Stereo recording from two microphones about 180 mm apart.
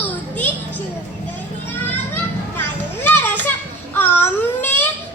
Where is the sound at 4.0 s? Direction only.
10° left (ahead or behind).